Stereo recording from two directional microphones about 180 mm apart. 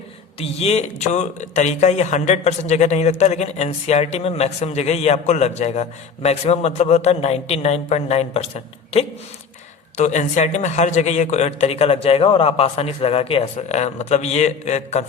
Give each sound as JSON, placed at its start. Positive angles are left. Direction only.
{"t": 0.3, "sound": "speech", "side_deg": 35}